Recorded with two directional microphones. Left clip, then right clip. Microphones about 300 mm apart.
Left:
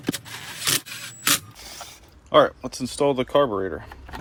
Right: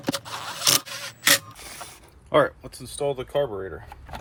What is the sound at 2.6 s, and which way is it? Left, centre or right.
Speech, centre.